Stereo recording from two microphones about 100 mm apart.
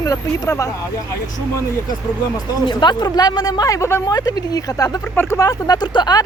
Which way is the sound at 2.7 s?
50° left (ahead or behind).